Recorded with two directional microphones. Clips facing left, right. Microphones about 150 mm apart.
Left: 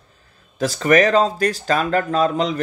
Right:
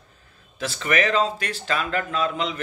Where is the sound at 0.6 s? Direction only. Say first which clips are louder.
Left 8 dB; 40° left (ahead or behind).